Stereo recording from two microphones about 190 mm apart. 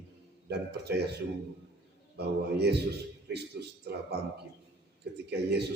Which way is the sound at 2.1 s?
60° right (ahead or behind).